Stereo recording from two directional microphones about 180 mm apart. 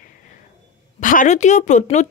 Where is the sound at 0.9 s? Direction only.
45° left (ahead or behind).